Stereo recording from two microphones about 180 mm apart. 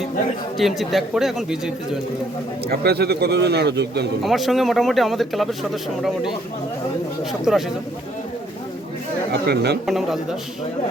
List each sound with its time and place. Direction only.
0.5 s speech: centre (ahead or behind)
2.6 s a man's voice: 65° right (ahead or behind)
4.2 s speech: centre (ahead or behind)
7.5 s speech: 5° right (ahead or behind)
9.3 s a man's voice: 65° right (ahead or behind)
9.8 s speech: centre (ahead or behind)